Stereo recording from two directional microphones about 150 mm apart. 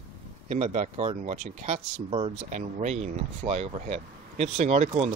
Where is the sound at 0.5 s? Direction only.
50° right (ahead or behind).